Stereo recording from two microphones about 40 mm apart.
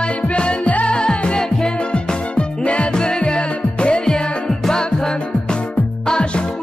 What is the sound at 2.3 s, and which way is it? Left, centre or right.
Music, left.